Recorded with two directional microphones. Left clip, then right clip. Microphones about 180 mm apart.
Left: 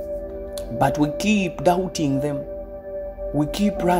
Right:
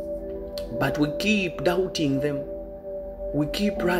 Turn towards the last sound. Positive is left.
turn(degrees=30)  # may be behind; listen again after turning